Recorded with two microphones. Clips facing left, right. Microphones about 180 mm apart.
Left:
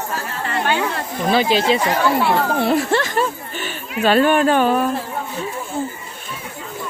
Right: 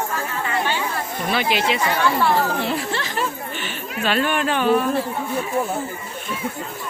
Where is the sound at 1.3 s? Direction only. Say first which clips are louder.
Left 5 dB; 30° left (ahead or behind).